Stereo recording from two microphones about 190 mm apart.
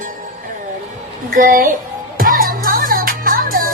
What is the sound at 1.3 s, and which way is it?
Speech, 45° right (ahead or behind).